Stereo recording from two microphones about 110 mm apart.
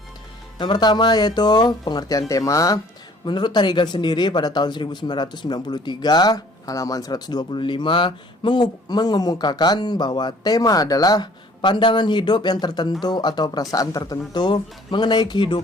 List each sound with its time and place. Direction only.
0.6 s speech: 40° left (ahead or behind)
3.2 s speech: 45° left (ahead or behind)